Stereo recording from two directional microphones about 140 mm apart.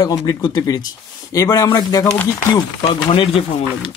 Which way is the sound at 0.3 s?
30° left (ahead or behind).